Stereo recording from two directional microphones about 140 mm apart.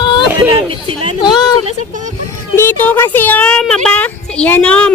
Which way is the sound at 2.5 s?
15° left (ahead or behind).